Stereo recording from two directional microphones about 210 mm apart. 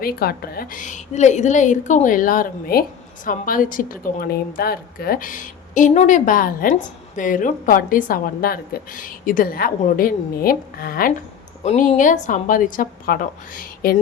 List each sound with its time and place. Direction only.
0.0 s speech: 45° left (ahead or behind)